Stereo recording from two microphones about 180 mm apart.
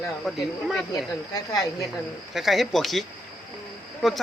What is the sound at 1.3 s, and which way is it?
Speech, 20° left (ahead or behind).